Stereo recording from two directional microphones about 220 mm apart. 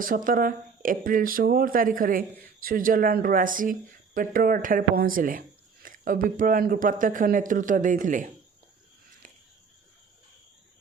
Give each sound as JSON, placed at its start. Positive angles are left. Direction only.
{"t": 0.3, "sound": "speech", "side_deg": -40}